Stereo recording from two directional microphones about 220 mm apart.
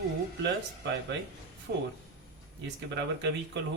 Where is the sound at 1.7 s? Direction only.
50° right (ahead or behind).